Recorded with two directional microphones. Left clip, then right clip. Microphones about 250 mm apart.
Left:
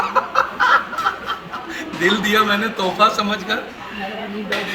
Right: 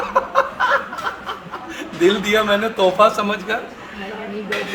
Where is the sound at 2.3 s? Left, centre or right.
Right.